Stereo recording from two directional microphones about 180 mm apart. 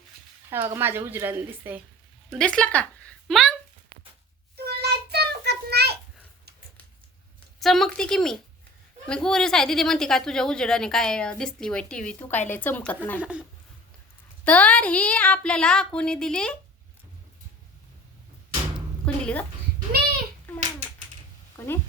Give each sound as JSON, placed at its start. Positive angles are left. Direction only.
{"t": 0.5, "sound": "a woman's voice", "side_deg": -10}
{"t": 2.3, "sound": "speech", "side_deg": 5}
{"t": 4.5, "sound": "child singing", "side_deg": -60}
{"t": 7.6, "sound": "speech", "side_deg": 0}
{"t": 13.1, "sound": "a woman's voice", "side_deg": -5}
{"t": 14.4, "sound": "speech", "side_deg": 5}
{"t": 19.0, "sound": "a woman's voice", "side_deg": 5}
{"t": 21.6, "sound": "a woman's voice", "side_deg": 15}